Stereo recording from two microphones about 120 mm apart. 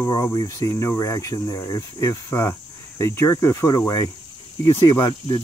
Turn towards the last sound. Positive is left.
turn(degrees=35)  # may be behind; listen again after turning